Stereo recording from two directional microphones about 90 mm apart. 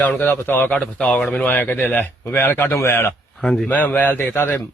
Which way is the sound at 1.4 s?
20° left (ahead or behind).